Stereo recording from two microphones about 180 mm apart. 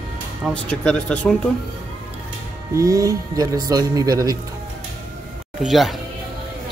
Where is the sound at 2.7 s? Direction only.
15° right (ahead or behind).